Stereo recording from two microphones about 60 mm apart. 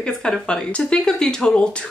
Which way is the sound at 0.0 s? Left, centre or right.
Centre.